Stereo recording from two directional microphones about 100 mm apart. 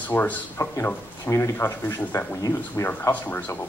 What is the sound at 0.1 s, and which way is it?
Speech, 25° left (ahead or behind).